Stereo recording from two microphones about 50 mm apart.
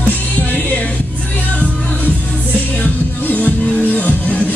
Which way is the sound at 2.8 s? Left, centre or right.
Left.